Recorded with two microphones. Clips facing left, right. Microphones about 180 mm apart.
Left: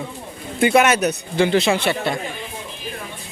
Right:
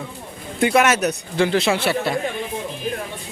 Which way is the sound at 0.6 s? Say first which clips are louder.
Left 1 dB; centre (ahead or behind).